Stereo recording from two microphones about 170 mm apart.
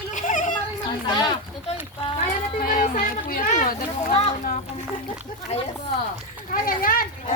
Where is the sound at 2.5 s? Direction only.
55° left (ahead or behind); by 4.3 s 40° left (ahead or behind).